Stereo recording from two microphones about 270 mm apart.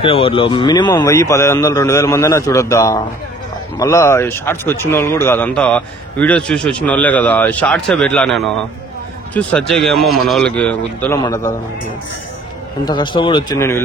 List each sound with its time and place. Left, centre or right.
0.0 s speech: centre
12.8 s speech: centre